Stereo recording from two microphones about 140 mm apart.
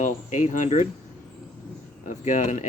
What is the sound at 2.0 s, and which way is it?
Speech, 60° left (ahead or behind).